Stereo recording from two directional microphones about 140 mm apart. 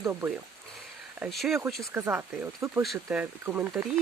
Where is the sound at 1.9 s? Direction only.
15° right (ahead or behind).